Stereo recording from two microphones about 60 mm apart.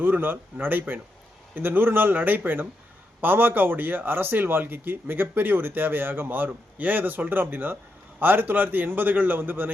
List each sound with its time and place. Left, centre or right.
0.0 s a man's voice: right